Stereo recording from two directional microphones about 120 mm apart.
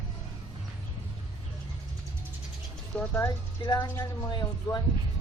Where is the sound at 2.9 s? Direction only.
10° left (ahead or behind).